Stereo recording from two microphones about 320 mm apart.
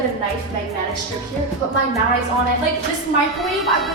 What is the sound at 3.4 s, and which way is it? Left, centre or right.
Speech, centre.